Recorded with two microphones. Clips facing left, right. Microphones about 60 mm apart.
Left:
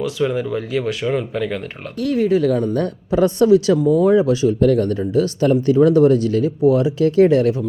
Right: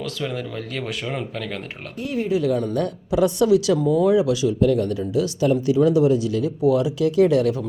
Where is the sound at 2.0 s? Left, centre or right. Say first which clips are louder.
Left 6 dB; left.